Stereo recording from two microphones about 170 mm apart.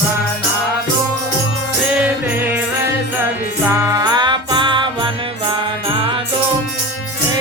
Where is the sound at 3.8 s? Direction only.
20° right (ahead or behind).